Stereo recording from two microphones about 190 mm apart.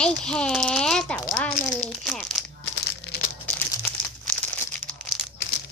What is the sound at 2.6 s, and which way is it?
Crumpling, 90° left.